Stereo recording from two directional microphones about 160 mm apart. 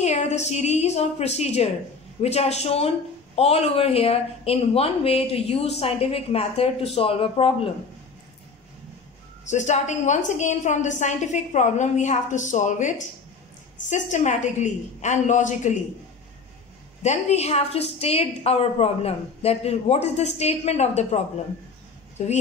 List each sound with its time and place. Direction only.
0.0 s a woman's voice: 45° left (ahead or behind)
9.5 s a woman's voice: 50° left (ahead or behind)
17.0 s a woman's voice: 45° left (ahead or behind)
22.2 s a woman's voice: 45° left (ahead or behind)